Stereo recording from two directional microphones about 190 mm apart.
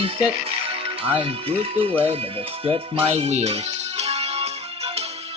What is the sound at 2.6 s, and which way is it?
Music, 30° right (ahead or behind).